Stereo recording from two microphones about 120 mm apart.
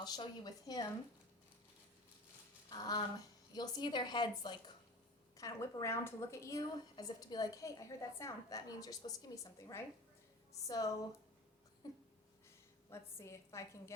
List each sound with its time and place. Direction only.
0.0 s a woman's voice: 35° left (ahead or behind)
2.6 s a sound: 35° left (ahead or behind)
3.5 s a woman's voice: 35° left (ahead or behind)
5.4 s a woman's voice: 25° left (ahead or behind)
12.9 s a woman's voice: 25° left (ahead or behind)